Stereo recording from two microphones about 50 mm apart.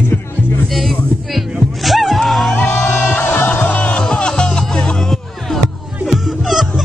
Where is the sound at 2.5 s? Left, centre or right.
Left.